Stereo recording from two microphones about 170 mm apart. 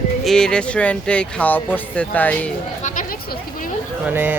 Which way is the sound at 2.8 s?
50° left (ahead or behind).